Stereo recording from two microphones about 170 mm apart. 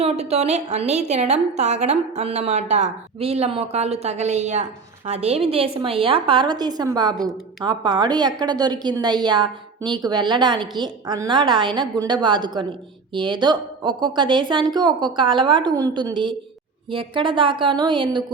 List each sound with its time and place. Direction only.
0.0 s a woman's voice: 40° right (ahead or behind)